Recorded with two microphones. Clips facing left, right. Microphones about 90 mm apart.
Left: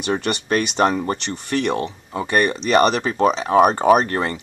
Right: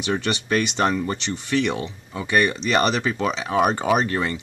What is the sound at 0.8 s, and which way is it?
Speech, 45° left (ahead or behind).